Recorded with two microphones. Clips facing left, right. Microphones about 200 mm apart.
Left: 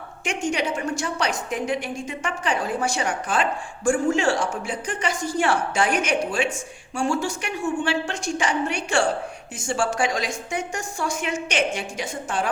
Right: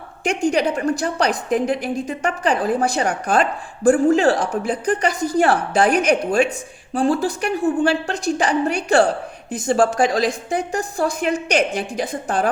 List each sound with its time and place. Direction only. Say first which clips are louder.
0.3 s a woman's voice: right 6 dB; 35° right (ahead or behind)